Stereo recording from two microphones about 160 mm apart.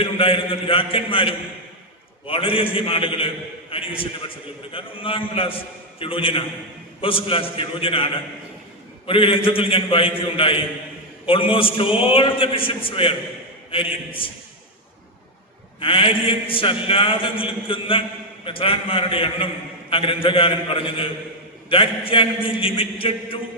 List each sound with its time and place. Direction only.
0.0 s a man's voice: 35° left (ahead or behind)
15.8 s a man's voice: 35° left (ahead or behind)